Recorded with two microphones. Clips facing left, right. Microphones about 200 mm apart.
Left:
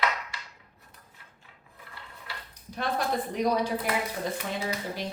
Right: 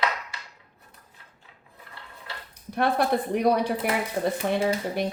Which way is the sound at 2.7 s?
60° right (ahead or behind).